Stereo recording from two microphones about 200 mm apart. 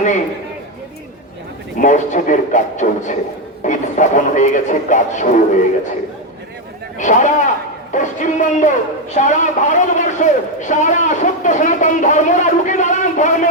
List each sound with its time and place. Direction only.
1.8 s a man's voice: 40° left (ahead or behind)
7.0 s a man's voice: 40° left (ahead or behind)